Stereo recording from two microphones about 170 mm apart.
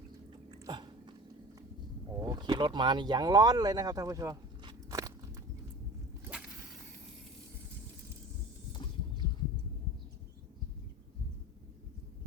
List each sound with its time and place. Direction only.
0.6 s biting: 25° right (ahead or behind)
2.1 s speech: 25° right (ahead or behind)
6.2 s whip: 5° right (ahead or behind)